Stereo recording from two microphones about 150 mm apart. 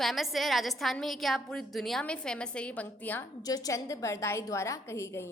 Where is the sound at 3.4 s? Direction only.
25° left (ahead or behind).